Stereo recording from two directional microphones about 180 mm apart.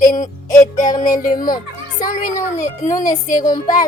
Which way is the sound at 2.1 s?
45° left (ahead or behind).